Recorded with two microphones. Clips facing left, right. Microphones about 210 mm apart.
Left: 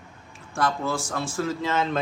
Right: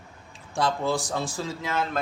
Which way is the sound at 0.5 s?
15° right (ahead or behind).